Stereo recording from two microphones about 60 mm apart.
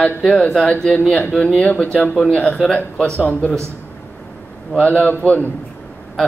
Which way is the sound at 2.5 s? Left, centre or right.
Centre.